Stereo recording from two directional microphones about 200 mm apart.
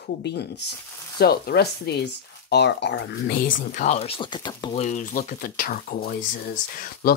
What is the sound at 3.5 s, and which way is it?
Speech, 35° left (ahead or behind).